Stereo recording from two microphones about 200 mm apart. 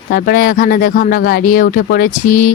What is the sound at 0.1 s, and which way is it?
Speech, 50° left (ahead or behind).